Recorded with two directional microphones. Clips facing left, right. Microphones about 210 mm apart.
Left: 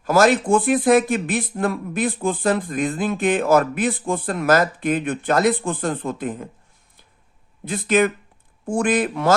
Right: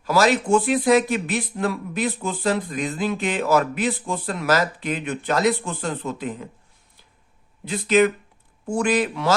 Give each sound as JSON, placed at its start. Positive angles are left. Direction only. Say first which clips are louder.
{"t": 0.0, "sound": "speech", "louder": "left 3 dB", "side_deg": 50}
{"t": 7.6, "sound": "speech", "louder": "right 1 dB", "side_deg": 50}